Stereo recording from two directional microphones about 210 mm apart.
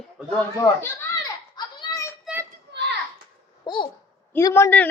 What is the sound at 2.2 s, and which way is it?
Child singing, 10° right (ahead or behind).